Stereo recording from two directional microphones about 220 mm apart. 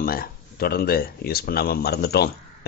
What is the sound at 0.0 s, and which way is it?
Speech, 40° left (ahead or behind).